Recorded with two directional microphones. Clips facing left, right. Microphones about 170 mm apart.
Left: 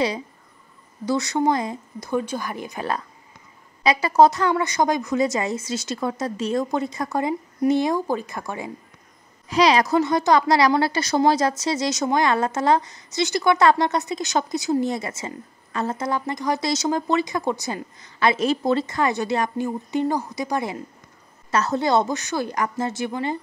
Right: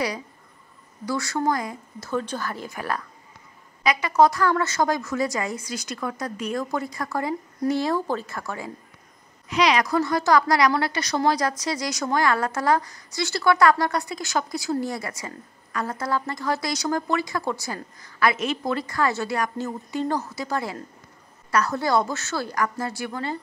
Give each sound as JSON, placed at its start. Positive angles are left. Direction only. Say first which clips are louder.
{"t": 1.0, "sound": "a woman's voice", "louder": "left 4 dB", "side_deg": 20}
{"t": 9.5, "sound": "a woman's voice", "louder": "left 3 dB", "side_deg": 30}
{"t": 9.9, "sound": "a woman's voice", "louder": "left 2 dB", "side_deg": 20}